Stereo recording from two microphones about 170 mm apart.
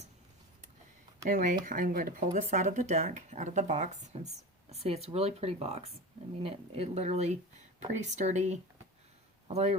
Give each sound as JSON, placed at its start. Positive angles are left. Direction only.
{"t": 1.3, "sound": "speech", "side_deg": -50}